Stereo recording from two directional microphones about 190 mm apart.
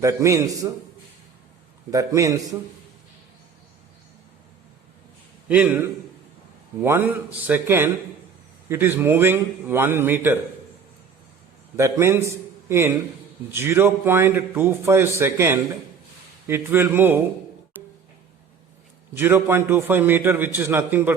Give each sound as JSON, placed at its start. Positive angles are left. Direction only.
{"t": 0.0, "sound": "a man's voice", "side_deg": -15}
{"t": 1.9, "sound": "a man's voice", "side_deg": -15}
{"t": 5.5, "sound": "a man's voice", "side_deg": -5}
{"t": 11.8, "sound": "a man's voice", "side_deg": -15}
{"t": 19.1, "sound": "a man's voice", "side_deg": -10}